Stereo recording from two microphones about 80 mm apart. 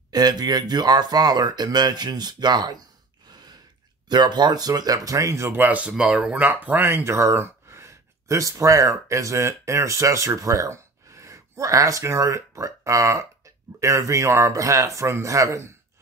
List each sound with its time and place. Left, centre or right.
0.1 s speech: right
5.5 s speech: right
6.3 s speech: right